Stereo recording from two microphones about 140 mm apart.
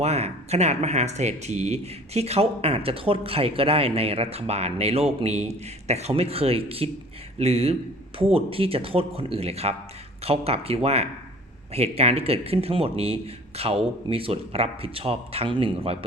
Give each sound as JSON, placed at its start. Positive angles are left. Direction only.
{"t": 0.0, "sound": "speech", "side_deg": -50}